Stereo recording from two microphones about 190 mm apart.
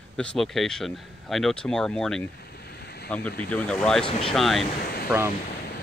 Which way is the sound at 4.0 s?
30° left (ahead or behind).